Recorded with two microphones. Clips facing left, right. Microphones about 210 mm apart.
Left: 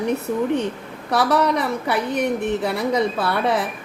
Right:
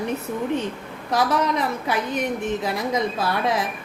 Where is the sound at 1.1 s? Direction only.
70° left (ahead or behind).